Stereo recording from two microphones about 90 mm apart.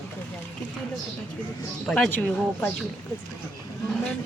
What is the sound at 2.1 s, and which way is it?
Speech, 15° left (ahead or behind).